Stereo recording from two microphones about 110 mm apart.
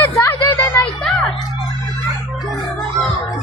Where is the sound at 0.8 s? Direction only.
5° left (ahead or behind).